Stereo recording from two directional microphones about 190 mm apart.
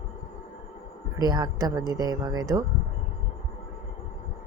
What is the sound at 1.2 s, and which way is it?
Speech, 20° right (ahead or behind).